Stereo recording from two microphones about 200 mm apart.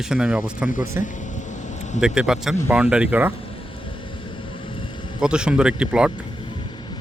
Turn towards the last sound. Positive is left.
turn(degrees=-5)  # may be behind; listen again after turning